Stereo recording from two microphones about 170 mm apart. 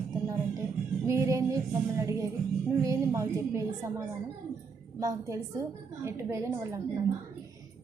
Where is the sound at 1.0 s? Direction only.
15° right (ahead or behind).